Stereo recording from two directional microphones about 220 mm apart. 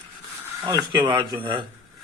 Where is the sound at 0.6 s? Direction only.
15° right (ahead or behind).